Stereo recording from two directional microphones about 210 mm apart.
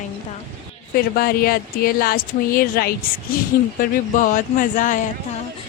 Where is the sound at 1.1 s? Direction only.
45° left (ahead or behind).